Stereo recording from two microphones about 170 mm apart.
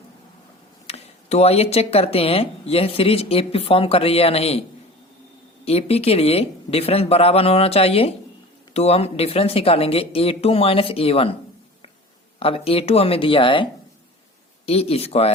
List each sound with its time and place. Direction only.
0.9 s speech: 40° left (ahead or behind)
5.6 s speech: 35° left (ahead or behind)
12.4 s speech: 35° left (ahead or behind)
14.7 s speech: 35° left (ahead or behind)